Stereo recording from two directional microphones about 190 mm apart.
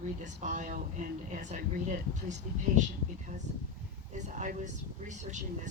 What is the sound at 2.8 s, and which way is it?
Speech, 40° right (ahead or behind).